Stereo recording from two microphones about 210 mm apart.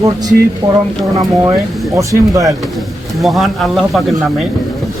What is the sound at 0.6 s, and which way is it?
Speech, 15° right (ahead or behind).